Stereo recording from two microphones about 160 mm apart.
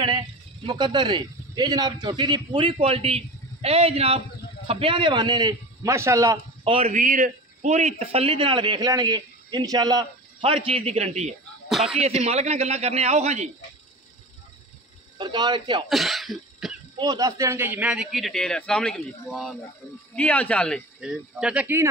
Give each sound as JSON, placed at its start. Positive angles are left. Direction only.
{"t": 0.7, "sound": "a man's voice", "side_deg": -30}
{"t": 6.6, "sound": "a man's voice", "side_deg": -35}
{"t": 6.9, "sound": "a man's voice", "side_deg": -55}
{"t": 11.7, "sound": "speech", "side_deg": 0}
{"t": 12.0, "sound": "a man's voice", "side_deg": -40}
{"t": 15.1, "sound": "a man's voice", "side_deg": -25}
{"t": 15.9, "sound": "cough", "side_deg": 0}
{"t": 16.9, "sound": "speech", "side_deg": -25}
{"t": 21.0, "sound": "speech", "side_deg": -5}